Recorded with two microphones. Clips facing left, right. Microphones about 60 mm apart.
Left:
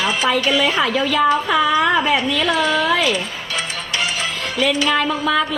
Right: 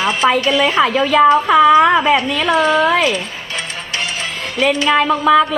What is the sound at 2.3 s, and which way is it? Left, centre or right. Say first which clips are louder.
Speech: right 2 dB; centre.